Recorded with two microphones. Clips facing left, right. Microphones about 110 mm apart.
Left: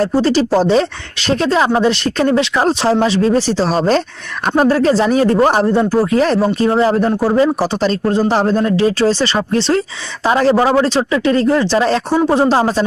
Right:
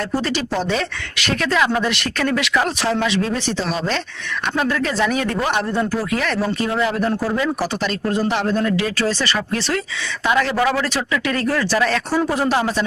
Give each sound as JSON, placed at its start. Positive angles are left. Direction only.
{"t": 0.0, "sound": "speech", "side_deg": 30}